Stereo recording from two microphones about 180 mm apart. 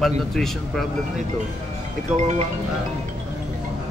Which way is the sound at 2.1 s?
40° right (ahead or behind).